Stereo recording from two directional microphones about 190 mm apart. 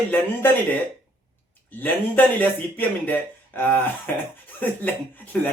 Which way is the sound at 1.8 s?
10° left (ahead or behind).